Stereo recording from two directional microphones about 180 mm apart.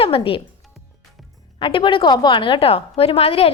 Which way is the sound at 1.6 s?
30° left (ahead or behind).